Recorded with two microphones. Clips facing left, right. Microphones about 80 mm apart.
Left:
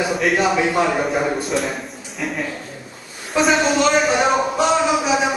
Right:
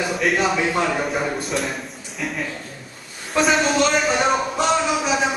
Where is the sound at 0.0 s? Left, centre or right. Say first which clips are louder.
Left 2 dB; centre.